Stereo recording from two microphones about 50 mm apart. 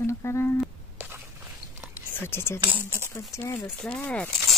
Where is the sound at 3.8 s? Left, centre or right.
Centre.